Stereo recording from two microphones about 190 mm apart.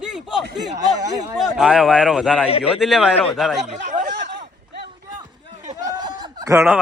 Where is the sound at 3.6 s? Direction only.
40° right (ahead or behind).